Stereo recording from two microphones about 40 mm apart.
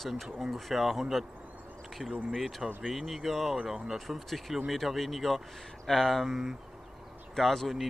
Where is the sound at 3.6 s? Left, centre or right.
Centre.